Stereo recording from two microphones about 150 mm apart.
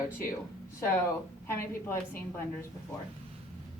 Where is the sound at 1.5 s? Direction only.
15° left (ahead or behind).